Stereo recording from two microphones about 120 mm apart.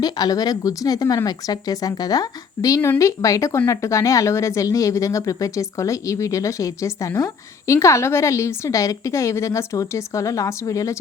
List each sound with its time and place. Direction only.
0.0 s speech: 30° left (ahead or behind)